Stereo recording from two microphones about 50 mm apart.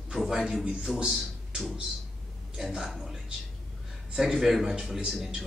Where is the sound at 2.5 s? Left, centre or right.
Centre.